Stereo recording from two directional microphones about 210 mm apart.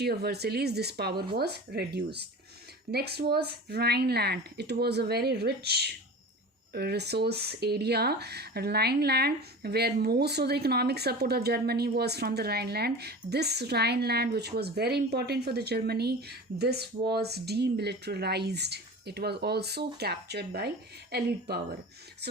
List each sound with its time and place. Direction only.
0.0 s speech: 50° right (ahead or behind)